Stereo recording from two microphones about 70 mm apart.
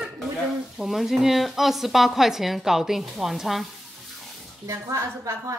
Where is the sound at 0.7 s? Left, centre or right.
Centre.